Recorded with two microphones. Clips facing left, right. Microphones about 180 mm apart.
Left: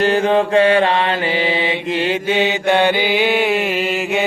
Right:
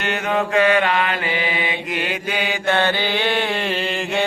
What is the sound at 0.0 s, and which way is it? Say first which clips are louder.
Mantra: left 7 dB; 30° left (ahead or behind).